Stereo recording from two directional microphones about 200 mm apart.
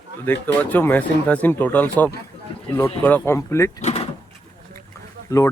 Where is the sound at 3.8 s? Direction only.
35° left (ahead or behind).